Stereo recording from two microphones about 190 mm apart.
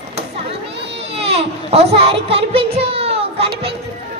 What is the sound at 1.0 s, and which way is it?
A child's voice, 30° right (ahead or behind).